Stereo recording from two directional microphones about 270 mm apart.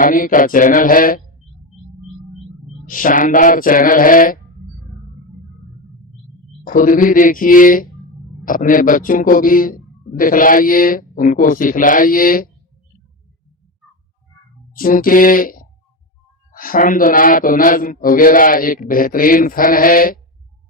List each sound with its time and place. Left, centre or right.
0.0 s a man's voice: left
2.8 s a man's voice: left
6.7 s a man's voice: left
14.7 s a man's voice: left